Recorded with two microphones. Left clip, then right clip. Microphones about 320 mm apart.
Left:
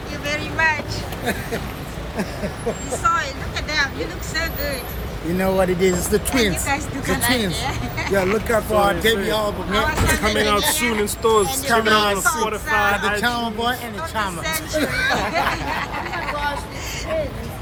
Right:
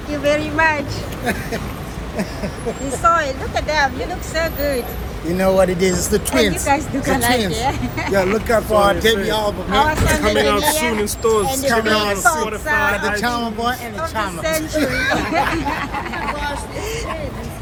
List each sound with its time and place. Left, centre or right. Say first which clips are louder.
0.1 s speech: right 8 dB; centre
3.0 s speech: right 5 dB; centre
5.4 s speech: right 4 dB; centre
11.0 s speech: left 2 dB; centre
16.3 s vehicle: left 2 dB; left